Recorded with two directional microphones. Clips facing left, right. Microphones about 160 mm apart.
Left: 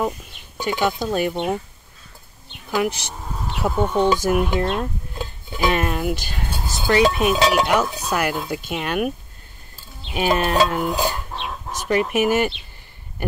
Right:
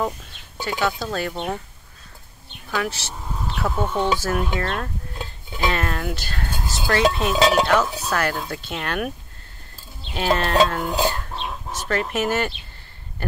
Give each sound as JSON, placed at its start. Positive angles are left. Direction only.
{"t": 0.0, "sound": "speech", "side_deg": 10}
{"t": 2.7, "sound": "speech", "side_deg": 15}
{"t": 4.2, "sound": "cutlery", "side_deg": 15}
{"t": 10.1, "sound": "cutlery", "side_deg": 10}
{"t": 11.7, "sound": "speech", "side_deg": 15}